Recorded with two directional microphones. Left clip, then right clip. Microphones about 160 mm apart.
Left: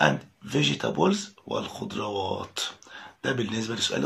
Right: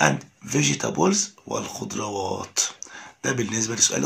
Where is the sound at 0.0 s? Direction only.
20° right (ahead or behind).